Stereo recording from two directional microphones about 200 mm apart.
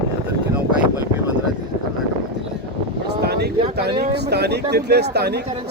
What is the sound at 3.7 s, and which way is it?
Speech, 55° right (ahead or behind).